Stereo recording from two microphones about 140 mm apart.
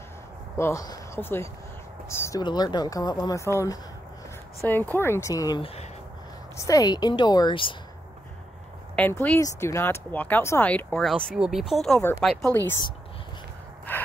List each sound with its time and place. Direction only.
0.6 s speech: 20° left (ahead or behind)
2.4 s speech: 30° left (ahead or behind)
9.0 s speech: 10° left (ahead or behind)
11.3 s speech: 5° right (ahead or behind)
13.9 s gasp: 15° left (ahead or behind)